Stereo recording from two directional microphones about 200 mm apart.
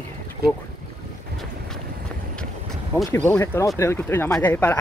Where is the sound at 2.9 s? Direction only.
10° left (ahead or behind).